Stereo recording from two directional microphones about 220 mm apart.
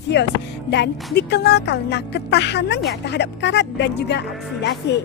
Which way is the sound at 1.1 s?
50° left (ahead or behind).